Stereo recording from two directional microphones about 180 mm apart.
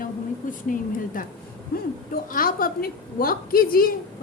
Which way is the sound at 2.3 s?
50° left (ahead or behind).